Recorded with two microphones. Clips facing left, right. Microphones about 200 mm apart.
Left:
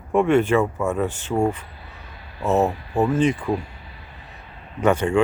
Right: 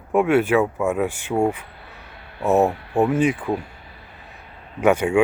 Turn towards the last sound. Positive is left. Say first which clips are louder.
# right 1 dB
turn(degrees=-10)  # may be behind; listen again after turning